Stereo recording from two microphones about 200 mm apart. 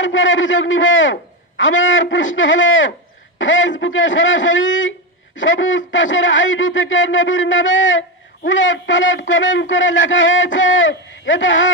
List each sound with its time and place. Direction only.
0.0 s a man's voice: 70° left (ahead or behind)